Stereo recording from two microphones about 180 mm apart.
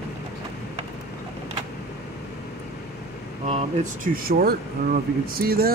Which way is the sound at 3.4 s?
40° right (ahead or behind).